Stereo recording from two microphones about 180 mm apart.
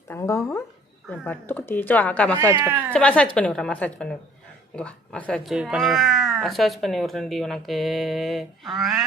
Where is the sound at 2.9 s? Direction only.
5° left (ahead or behind).